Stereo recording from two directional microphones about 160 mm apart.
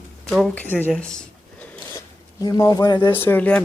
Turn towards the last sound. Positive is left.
turn(degrees=10)  # may be behind; listen again after turning